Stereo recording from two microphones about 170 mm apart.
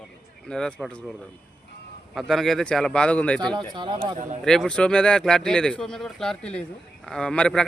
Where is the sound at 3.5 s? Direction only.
25° right (ahead or behind).